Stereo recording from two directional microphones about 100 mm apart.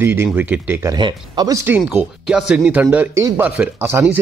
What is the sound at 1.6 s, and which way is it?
A man's voice, 15° right (ahead or behind).